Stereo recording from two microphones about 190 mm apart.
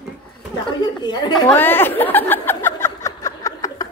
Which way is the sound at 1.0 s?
20° left (ahead or behind).